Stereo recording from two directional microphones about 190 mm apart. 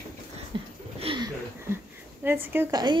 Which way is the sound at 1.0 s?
25° right (ahead or behind).